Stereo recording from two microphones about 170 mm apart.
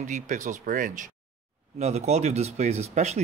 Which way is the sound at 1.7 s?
40° right (ahead or behind).